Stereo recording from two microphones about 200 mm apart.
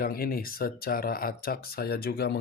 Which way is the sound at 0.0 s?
45° left (ahead or behind).